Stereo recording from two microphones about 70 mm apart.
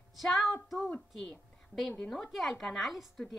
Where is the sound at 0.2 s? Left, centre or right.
Centre.